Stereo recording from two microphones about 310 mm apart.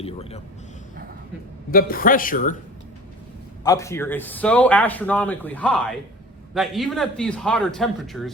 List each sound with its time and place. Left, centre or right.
0.0 s a sound: centre
1.7 s speech: left
3.6 s speech: centre